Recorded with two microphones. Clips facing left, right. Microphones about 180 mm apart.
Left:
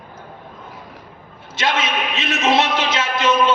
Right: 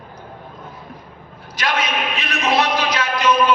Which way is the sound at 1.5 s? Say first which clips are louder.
Left 1 dB; 25° left (ahead or behind).